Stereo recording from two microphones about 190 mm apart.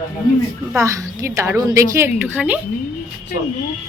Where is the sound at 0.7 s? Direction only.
15° right (ahead or behind).